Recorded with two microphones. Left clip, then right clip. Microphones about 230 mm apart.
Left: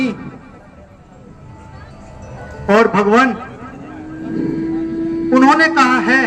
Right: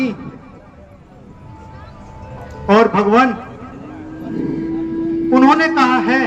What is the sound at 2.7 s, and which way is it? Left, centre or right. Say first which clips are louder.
Speech: even; left.